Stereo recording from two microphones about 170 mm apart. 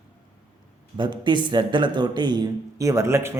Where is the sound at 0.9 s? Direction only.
25° right (ahead or behind).